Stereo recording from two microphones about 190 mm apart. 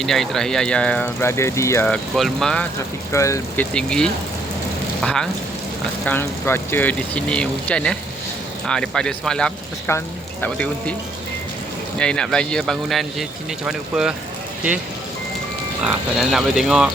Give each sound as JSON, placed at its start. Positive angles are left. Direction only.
{"t": 0.0, "sound": "speech", "side_deg": 0}
{"t": 3.1, "sound": "speech", "side_deg": 15}
{"t": 3.8, "sound": "speech", "side_deg": 5}
{"t": 11.9, "sound": "speech", "side_deg": 5}
{"t": 15.9, "sound": "speech", "side_deg": 0}